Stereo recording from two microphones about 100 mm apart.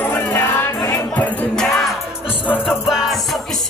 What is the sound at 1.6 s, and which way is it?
Music, 5° left (ahead or behind).